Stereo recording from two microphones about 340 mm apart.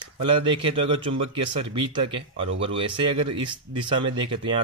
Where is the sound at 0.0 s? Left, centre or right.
Centre.